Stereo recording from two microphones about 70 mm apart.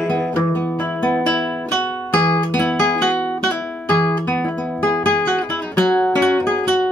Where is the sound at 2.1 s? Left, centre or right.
Left.